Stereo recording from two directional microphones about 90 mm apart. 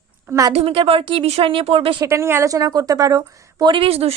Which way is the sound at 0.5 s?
90° right.